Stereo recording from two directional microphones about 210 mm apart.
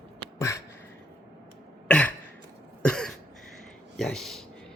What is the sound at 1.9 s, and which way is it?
Throat clearing, 5° left (ahead or behind).